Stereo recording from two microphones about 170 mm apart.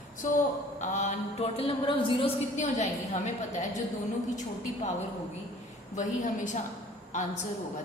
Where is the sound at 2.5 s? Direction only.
45° left (ahead or behind).